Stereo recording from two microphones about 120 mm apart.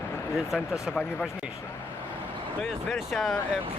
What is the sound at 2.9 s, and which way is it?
Speech, 5° left (ahead or behind).